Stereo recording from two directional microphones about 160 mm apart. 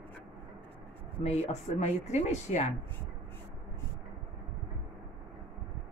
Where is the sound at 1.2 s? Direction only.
45° left (ahead or behind).